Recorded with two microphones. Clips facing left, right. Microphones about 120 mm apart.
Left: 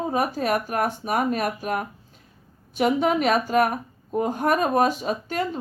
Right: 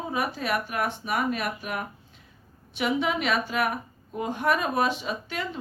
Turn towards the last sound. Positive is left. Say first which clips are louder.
# left 6 dB
turn(degrees=40)  # may be behind; listen again after turning